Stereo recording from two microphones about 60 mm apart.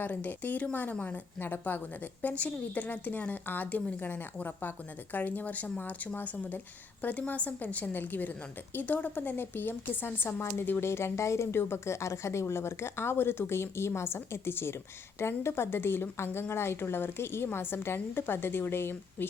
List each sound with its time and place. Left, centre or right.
0.0 s a woman's voice: left